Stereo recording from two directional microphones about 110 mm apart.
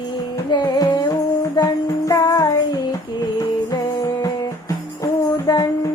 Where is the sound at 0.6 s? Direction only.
40° left (ahead or behind).